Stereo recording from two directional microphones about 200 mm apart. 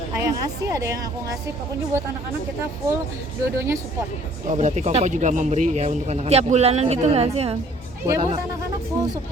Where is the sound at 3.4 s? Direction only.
15° right (ahead or behind).